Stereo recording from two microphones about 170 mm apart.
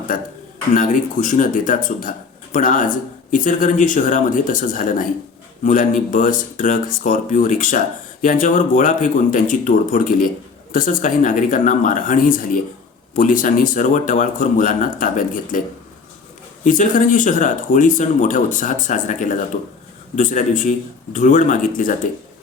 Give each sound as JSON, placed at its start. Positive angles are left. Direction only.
{"t": 0.1, "sound": "speech", "side_deg": 55}
{"t": 16.6, "sound": "speech", "side_deg": 50}